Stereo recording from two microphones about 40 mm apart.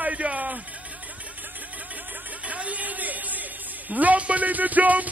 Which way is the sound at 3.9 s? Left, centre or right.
Right.